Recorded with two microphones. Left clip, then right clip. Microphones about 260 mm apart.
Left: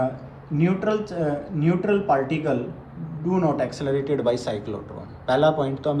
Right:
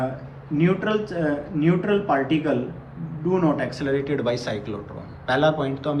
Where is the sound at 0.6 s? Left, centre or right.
Left.